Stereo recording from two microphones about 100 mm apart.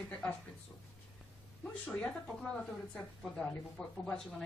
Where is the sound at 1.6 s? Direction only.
10° left (ahead or behind).